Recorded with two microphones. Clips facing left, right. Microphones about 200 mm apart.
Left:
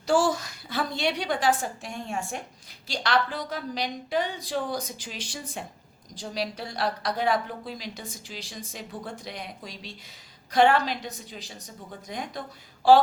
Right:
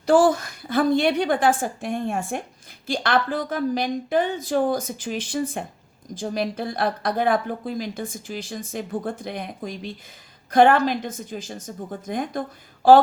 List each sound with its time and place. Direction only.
0.0 s a woman's voice: 55° right (ahead or behind)